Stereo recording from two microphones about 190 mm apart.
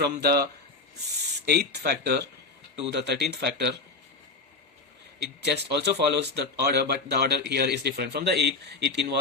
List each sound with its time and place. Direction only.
0.0 s speech: 55° right (ahead or behind)
1.5 s speech: 60° right (ahead or behind)
5.2 s speech: 60° right (ahead or behind)